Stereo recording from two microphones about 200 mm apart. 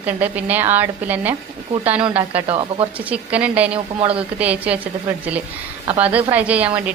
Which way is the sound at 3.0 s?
5° right (ahead or behind).